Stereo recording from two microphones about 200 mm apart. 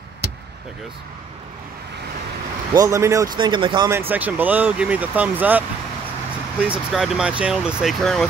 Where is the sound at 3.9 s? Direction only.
10° right (ahead or behind).